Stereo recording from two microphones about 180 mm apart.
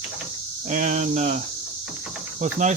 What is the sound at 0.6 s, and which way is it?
Speech, 40° right (ahead or behind).